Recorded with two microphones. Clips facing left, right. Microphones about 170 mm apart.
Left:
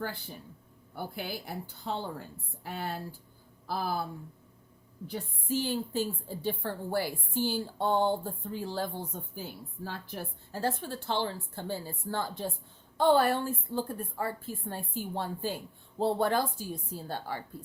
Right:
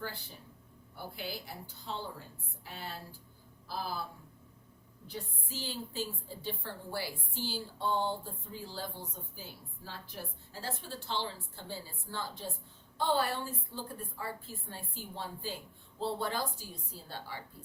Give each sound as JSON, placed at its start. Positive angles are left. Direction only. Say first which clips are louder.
{"t": 0.9, "sound": "a woman's voice", "louder": "left 5 dB", "side_deg": 55}
{"t": 5.0, "sound": "a woman's voice", "louder": "left 8 dB", "side_deg": 55}